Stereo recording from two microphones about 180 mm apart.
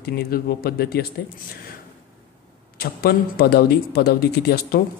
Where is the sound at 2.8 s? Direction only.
60° left (ahead or behind).